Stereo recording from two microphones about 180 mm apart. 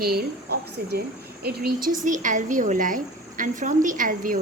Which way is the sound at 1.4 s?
60° right (ahead or behind).